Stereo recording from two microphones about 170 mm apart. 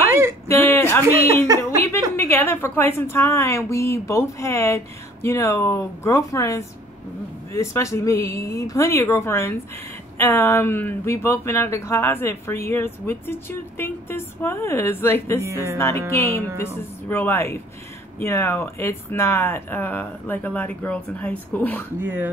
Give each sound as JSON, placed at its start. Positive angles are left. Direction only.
{"t": 0.5, "sound": "a sound", "side_deg": 10}
{"t": 1.6, "sound": "speech", "side_deg": 15}
{"t": 15.4, "sound": "music", "side_deg": -15}
{"t": 16.2, "sound": "speech", "side_deg": 15}
{"t": 22.0, "sound": "music", "side_deg": -10}